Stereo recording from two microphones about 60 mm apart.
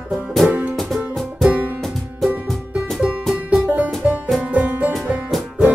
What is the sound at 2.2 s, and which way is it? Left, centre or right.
Music, centre.